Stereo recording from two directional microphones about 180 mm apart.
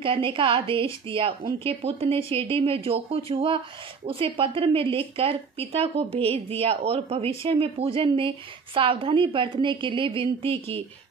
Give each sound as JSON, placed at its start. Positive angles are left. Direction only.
{"t": 0.0, "sound": "a woman's voice", "side_deg": -30}